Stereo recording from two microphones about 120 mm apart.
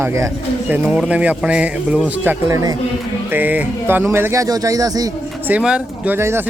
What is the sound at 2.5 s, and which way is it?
Speech, 30° right (ahead or behind).